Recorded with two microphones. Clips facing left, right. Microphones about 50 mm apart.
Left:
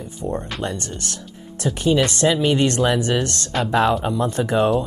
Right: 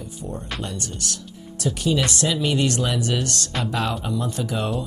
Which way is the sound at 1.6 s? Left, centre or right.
Left.